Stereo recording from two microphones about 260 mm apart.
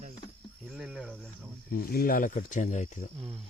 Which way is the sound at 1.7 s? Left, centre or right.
Left.